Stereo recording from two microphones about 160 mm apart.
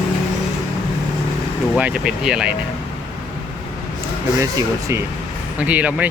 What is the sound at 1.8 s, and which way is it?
Speech, 5° right (ahead or behind).